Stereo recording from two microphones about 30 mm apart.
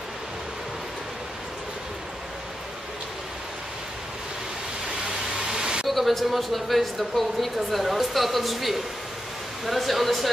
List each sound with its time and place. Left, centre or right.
5.0 s vehicle: right
5.9 s speech: centre